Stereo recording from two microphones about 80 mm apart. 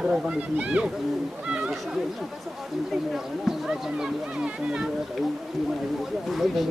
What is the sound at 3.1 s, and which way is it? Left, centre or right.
Speech, centre.